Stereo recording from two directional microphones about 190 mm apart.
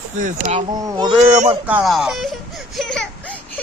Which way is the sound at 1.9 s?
Centre (ahead or behind).